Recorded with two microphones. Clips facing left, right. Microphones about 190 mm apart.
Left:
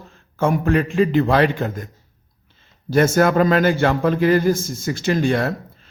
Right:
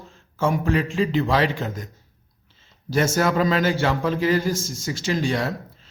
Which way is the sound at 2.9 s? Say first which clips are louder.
Left 5 dB; 55° left (ahead or behind).